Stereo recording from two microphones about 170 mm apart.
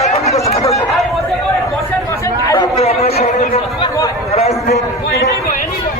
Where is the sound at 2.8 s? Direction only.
35° left (ahead or behind).